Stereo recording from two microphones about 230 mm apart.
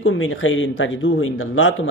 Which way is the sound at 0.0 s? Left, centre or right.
Left.